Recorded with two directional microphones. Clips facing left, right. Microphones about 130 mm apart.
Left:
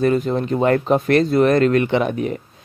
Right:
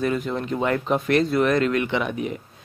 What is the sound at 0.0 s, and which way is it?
A man's voice, 35° left (ahead or behind).